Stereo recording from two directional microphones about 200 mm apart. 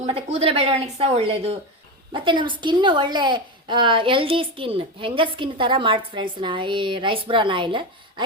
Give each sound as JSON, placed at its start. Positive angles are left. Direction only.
{"t": 0.3, "sound": "a woman's voice", "side_deg": -30}